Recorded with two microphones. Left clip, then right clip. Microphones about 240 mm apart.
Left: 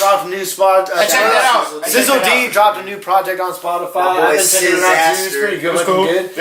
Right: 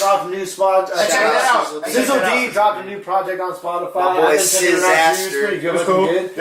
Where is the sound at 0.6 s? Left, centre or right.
Centre.